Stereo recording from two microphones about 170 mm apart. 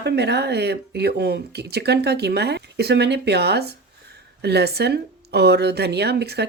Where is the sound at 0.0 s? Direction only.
80° right.